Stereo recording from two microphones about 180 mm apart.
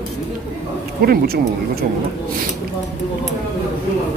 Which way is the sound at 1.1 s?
55° right (ahead or behind).